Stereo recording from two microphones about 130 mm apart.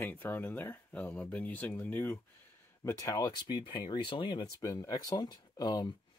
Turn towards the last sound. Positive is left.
turn(degrees=35)  # may be behind; listen again after turning